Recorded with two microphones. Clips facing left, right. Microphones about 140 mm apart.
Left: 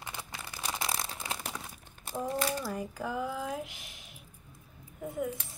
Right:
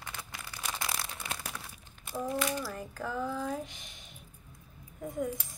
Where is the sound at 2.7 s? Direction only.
10° left (ahead or behind).